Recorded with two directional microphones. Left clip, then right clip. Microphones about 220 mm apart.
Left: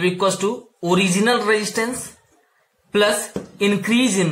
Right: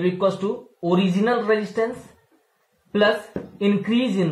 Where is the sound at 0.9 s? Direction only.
25° left (ahead or behind).